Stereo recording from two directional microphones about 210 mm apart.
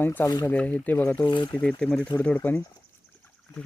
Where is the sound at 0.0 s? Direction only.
10° left (ahead or behind).